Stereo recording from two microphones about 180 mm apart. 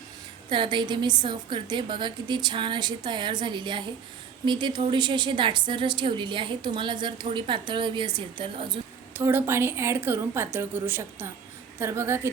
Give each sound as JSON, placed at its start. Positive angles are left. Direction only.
{"t": 0.5, "sound": "a woman's voice", "side_deg": -25}
{"t": 9.1, "sound": "a woman's voice", "side_deg": -15}